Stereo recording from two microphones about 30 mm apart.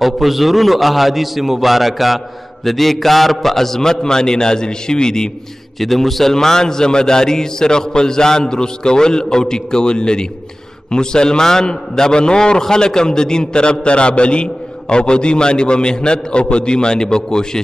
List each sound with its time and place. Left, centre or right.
0.0 s a man's voice: centre; by 5.3 s left
5.8 s a man's voice: centre
6.3 s a man's voice: left